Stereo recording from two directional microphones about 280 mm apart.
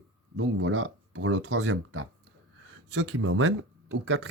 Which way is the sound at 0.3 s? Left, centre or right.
Right.